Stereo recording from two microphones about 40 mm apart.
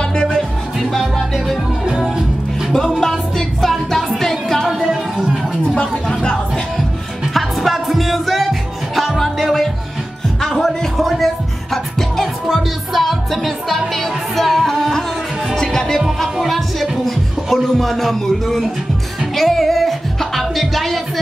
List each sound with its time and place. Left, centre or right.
0.0 s music: left
0.8 s music: centre
1.9 s music: centre
3.0 s music: centre
4.6 s music: centre
5.8 s a sound: left
7.3 s music: centre
11.0 s music: centre
16.3 s music: centre